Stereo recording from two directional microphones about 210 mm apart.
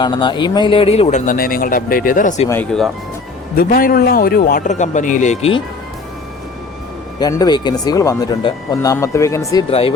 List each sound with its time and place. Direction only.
0.0 s speech: 20° left (ahead or behind)
2.5 s speech: 5° left (ahead or behind)
3.5 s speech: 45° left (ahead or behind); by 5.6 s 30° left (ahead or behind)
7.2 s speech: 20° left (ahead or behind)